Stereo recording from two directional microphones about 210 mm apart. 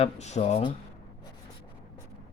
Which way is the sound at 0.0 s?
30° left (ahead or behind).